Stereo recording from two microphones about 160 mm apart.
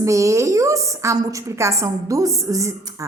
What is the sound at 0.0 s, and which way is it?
A woman's voice, 20° right (ahead or behind).